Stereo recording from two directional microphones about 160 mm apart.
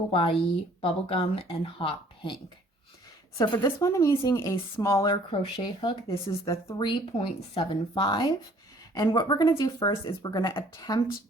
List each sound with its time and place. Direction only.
0.1 s speech: 35° left (ahead or behind)
3.5 s speech: 20° left (ahead or behind)
5.1 s speech: 30° left (ahead or behind)
6.7 s speech: 30° left (ahead or behind)